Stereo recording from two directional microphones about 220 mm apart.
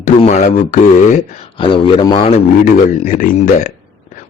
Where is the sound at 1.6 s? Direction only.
20° left (ahead or behind).